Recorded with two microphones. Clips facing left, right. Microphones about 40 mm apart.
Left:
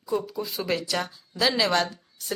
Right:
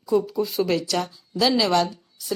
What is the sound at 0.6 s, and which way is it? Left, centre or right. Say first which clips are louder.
Speech: right 2 dB; centre.